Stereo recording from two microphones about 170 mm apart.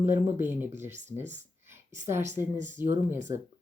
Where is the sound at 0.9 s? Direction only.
45° right (ahead or behind).